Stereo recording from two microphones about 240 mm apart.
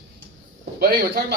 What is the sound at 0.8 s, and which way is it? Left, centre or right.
Speech, right.